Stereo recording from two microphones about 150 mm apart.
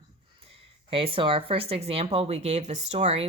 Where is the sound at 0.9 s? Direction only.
35° right (ahead or behind).